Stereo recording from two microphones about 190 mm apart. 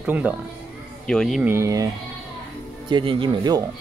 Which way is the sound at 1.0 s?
5° left (ahead or behind).